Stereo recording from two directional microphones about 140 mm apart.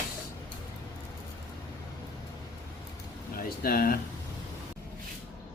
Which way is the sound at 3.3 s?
90° left.